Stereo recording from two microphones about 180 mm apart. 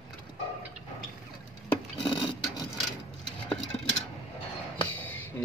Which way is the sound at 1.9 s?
25° left (ahead or behind).